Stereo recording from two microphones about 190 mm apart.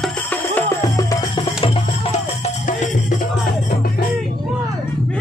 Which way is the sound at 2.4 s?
40° left (ahead or behind).